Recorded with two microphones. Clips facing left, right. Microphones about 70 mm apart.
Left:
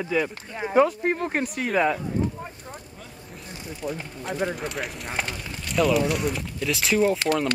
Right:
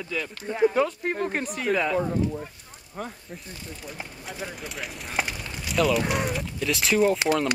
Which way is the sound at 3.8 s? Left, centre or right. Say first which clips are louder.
Left 13 dB; left.